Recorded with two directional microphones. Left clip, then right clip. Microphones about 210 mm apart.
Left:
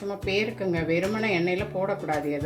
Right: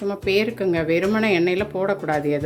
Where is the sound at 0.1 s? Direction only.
40° right (ahead or behind).